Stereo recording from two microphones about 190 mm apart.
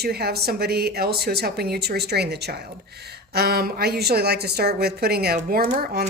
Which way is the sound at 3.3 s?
55° right (ahead or behind).